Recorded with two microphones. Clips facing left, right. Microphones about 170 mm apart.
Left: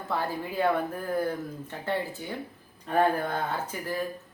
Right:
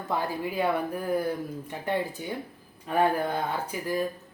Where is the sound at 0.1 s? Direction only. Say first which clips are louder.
Right 1 dB; 15° right (ahead or behind).